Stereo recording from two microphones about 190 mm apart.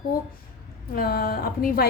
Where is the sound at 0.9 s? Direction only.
50° left (ahead or behind).